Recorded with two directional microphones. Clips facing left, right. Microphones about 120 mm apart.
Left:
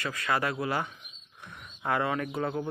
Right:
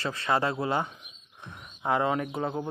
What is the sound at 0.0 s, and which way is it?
Speech, 30° right (ahead or behind).